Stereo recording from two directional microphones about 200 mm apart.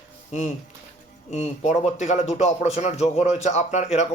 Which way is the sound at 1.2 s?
35° left (ahead or behind).